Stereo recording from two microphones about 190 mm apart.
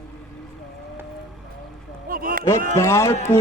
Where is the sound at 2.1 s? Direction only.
50° right (ahead or behind).